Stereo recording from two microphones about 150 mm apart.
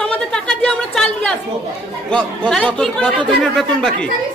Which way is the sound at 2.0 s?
5° left (ahead or behind).